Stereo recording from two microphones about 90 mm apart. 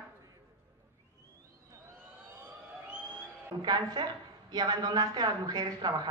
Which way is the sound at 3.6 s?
50° right (ahead or behind).